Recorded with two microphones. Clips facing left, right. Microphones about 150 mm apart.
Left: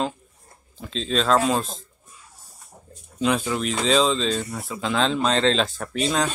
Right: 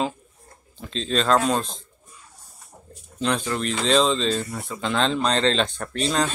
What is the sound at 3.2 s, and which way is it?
Speech, 5° left (ahead or behind).